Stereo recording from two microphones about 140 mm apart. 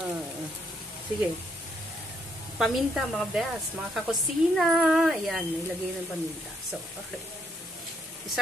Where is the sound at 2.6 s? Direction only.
Centre (ahead or behind).